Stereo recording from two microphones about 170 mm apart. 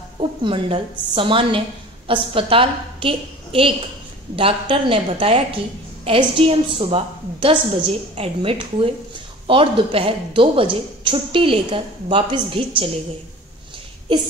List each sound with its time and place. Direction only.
0.2 s a woman's voice: 30° right (ahead or behind)